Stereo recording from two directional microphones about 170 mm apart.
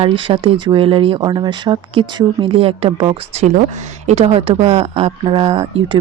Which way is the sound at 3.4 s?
45° right (ahead or behind).